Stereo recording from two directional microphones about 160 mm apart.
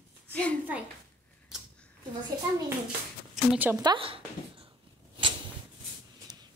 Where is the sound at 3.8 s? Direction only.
30° right (ahead or behind).